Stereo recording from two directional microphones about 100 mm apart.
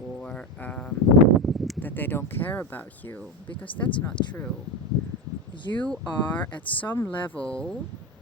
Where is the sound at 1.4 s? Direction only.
Centre (ahead or behind).